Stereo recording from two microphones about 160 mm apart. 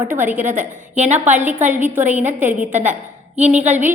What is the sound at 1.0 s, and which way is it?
Speech, 45° right (ahead or behind).